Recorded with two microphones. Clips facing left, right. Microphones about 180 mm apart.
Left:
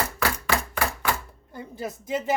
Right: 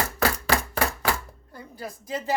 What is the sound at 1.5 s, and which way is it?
Speech, 25° left (ahead or behind).